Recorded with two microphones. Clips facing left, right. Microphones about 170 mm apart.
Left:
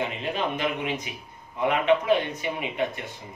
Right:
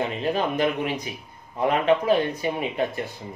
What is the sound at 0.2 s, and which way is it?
Speech, 40° right (ahead or behind).